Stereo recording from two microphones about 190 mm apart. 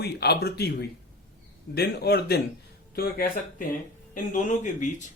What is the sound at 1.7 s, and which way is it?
Speech, 55° left (ahead or behind).